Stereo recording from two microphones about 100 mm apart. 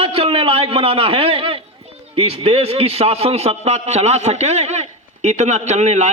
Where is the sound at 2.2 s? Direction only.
75° right (ahead or behind).